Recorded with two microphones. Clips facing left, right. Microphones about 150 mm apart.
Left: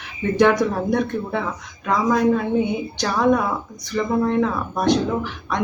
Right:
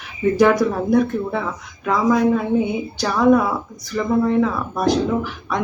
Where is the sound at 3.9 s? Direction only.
5° right (ahead or behind).